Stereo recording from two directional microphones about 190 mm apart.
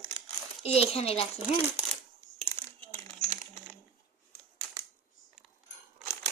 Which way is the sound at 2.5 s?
15° left (ahead or behind).